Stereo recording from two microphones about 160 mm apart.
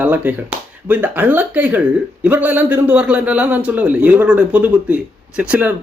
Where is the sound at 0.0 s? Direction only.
10° right (ahead or behind).